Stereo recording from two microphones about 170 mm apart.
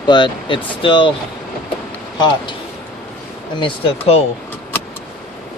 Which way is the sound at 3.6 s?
35° left (ahead or behind).